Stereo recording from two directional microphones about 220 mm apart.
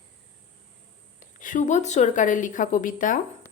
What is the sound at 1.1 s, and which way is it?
Speech, 35° left (ahead or behind).